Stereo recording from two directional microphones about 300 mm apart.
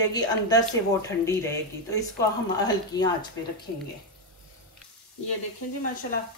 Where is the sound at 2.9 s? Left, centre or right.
Centre.